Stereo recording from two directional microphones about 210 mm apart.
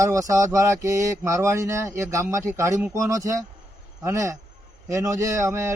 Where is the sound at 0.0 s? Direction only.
15° right (ahead or behind).